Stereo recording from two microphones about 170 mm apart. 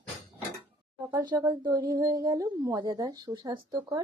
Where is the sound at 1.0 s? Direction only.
20° right (ahead or behind).